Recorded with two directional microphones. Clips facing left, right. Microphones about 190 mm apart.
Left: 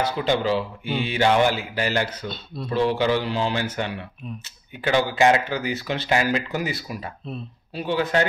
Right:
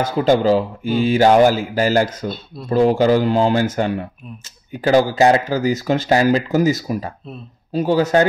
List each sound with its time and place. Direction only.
0.1 s speech: 40° right (ahead or behind)